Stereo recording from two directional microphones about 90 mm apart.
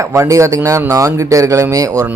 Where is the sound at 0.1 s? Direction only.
35° right (ahead or behind).